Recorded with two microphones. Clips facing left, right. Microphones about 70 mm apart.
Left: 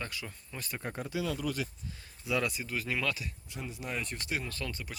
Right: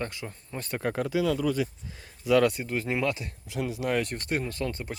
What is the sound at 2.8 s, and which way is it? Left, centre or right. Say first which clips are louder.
Speech: right 4 dB; right.